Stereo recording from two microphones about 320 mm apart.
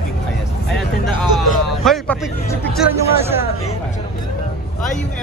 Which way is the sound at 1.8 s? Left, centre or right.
Centre.